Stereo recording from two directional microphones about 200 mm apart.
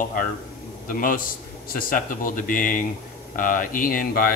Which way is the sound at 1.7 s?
45° left (ahead or behind).